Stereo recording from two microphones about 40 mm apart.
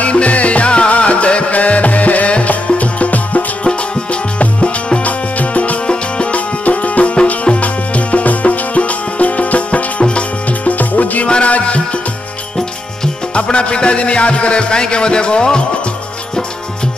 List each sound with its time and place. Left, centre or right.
0.0 s music: left
5.0 s music: left
5.9 s music: left
11.2 s music: left
13.3 s music: left